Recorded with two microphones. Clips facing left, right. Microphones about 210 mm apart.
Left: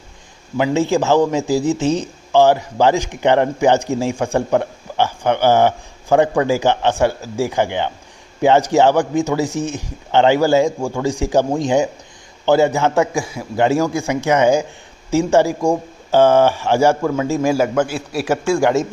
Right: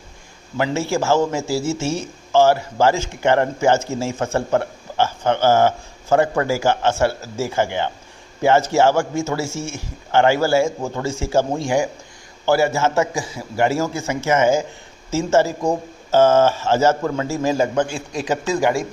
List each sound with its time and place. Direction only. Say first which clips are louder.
0.5 s speech: left 5 dB; 15° left (ahead or behind)